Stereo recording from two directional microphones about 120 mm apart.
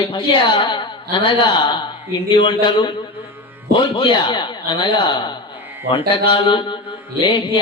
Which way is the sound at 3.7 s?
40° left (ahead or behind).